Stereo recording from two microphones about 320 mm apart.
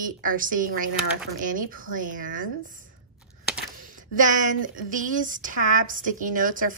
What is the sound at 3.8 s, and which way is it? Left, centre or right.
Speech, right.